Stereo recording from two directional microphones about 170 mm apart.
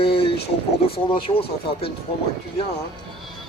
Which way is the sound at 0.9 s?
35° left (ahead or behind).